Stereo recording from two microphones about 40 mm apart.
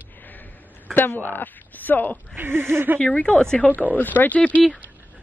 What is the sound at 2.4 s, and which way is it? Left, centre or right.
Speech, right.